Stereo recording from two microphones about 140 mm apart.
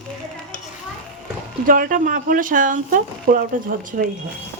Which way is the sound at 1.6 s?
85° right.